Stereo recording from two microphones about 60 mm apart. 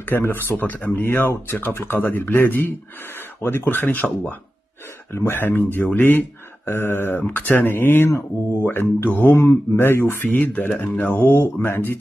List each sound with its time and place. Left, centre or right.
0.0 s speech: left
5.1 s speech: left
10.2 s speech: left